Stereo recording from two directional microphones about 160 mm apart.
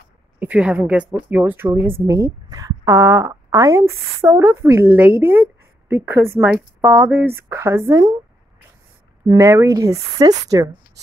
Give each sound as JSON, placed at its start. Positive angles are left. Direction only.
{"t": 0.4, "sound": "a woman's voice", "side_deg": -10}
{"t": 9.3, "sound": "a woman's voice", "side_deg": -20}